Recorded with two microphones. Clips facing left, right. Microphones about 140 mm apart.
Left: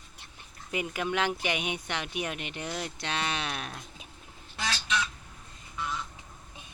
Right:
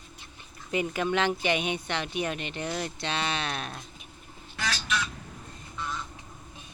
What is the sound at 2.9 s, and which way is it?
Speech, 10° left (ahead or behind).